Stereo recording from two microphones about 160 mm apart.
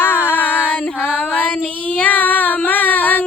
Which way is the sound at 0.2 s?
10° right (ahead or behind).